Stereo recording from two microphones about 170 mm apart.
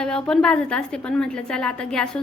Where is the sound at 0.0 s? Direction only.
5° left (ahead or behind).